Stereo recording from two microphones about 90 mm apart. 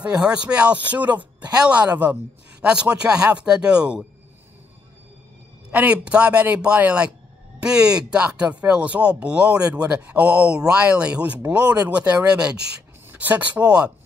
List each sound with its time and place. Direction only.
0.0 s speech: 10° right (ahead or behind)
5.7 s speech: 15° right (ahead or behind)